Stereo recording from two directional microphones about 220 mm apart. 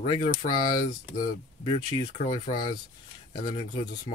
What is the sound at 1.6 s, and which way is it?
Speech, 25° left (ahead or behind).